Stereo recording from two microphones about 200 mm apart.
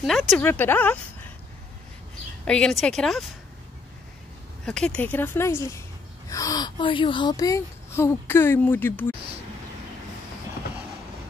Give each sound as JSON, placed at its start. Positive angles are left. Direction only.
{"t": 0.0, "sound": "speech", "side_deg": 0}
{"t": 0.4, "sound": "speech", "side_deg": 10}
{"t": 2.4, "sound": "speech", "side_deg": 5}
{"t": 4.6, "sound": "speech", "side_deg": 5}